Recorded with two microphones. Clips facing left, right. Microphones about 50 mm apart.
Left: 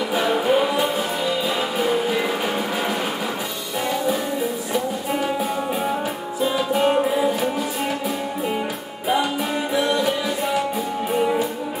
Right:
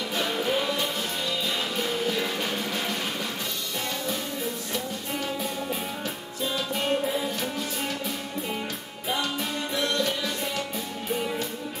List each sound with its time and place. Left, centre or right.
0.1 s music: centre
6.4 s music: centre
9.8 s music: centre